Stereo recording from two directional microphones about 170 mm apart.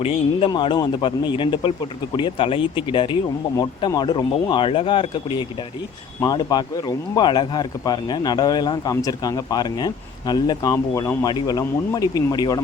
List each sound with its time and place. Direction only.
0.0 s speech: 35° left (ahead or behind)